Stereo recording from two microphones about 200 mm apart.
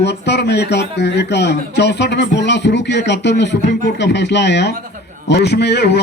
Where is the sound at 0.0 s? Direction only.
60° left (ahead or behind).